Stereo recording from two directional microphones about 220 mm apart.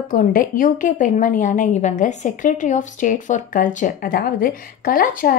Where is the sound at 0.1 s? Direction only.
40° left (ahead or behind).